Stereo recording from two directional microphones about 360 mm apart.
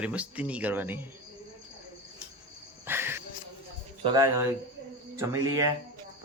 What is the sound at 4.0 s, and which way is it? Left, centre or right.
Speech, centre.